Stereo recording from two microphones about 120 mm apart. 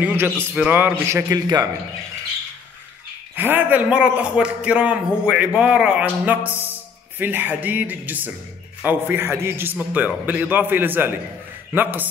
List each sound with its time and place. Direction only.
0.0 s a man's voice: 20° right (ahead or behind)
3.3 s a man's voice: 15° right (ahead or behind)